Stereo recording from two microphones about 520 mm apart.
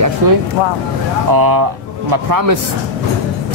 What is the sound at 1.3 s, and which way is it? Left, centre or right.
Speech, right.